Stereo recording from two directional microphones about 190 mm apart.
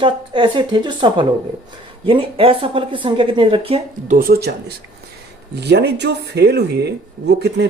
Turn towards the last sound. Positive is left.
turn(degrees=-60)  # may be behind; listen again after turning